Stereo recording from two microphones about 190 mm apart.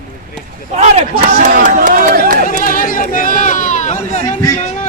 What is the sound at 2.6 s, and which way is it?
Speech, 45° left (ahead or behind).